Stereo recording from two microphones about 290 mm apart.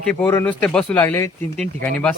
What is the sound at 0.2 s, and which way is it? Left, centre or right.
A man's voice, centre.